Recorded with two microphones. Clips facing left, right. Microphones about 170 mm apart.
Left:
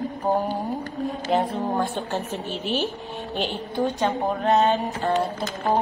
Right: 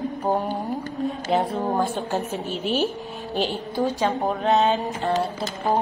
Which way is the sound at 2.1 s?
40° right (ahead or behind).